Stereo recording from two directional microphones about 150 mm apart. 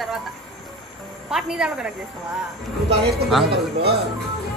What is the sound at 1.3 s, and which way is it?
Speech, 5° right (ahead or behind).